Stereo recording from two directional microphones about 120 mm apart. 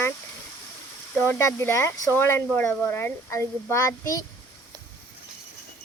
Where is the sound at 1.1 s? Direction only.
15° left (ahead or behind).